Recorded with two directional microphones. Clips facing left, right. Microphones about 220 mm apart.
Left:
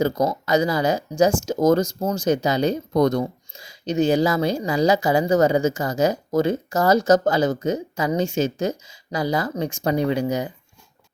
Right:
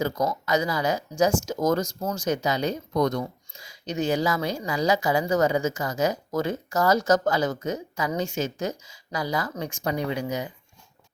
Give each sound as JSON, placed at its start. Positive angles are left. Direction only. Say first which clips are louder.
{"t": 0.0, "sound": "speech", "louder": "left 5 dB", "side_deg": 30}